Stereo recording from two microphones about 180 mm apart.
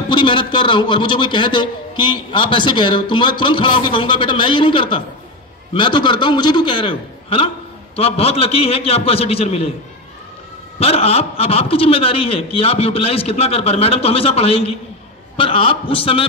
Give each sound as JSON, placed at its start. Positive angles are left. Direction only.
{"t": 0.1, "sound": "a man's voice", "side_deg": 25}
{"t": 10.8, "sound": "a man's voice", "side_deg": 35}